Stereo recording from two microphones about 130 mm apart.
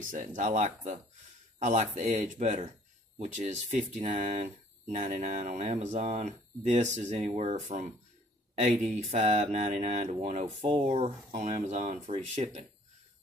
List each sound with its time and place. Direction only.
0.1 s speech: 85° right
1.6 s speech: 65° right (ahead or behind)
10.4 s speech: 40° right (ahead or behind)
11.3 s speech: 55° right (ahead or behind)